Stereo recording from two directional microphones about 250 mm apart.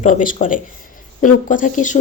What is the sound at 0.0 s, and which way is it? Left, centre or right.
Speech, left.